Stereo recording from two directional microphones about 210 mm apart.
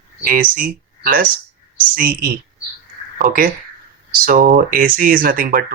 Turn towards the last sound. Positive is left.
turn(degrees=-45)  # may be behind; listen again after turning